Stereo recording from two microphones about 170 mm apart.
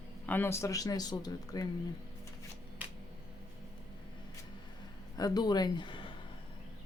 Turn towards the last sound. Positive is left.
turn(degrees=30)  # may be behind; listen again after turning